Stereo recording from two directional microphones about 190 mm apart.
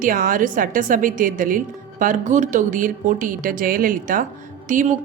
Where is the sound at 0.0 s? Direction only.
45° right (ahead or behind).